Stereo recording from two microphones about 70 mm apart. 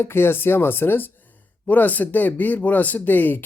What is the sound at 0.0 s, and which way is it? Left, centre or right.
Speech, left.